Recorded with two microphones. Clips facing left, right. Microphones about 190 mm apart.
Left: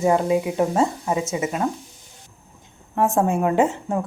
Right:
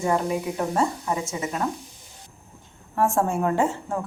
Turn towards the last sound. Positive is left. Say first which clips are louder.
# left 4 dB
turn(degrees=20)  # may be behind; listen again after turning